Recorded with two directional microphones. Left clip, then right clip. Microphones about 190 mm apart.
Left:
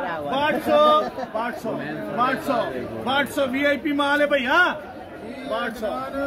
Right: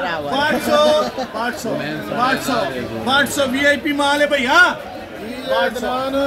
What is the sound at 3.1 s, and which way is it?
A man's voice, 20° left (ahead or behind).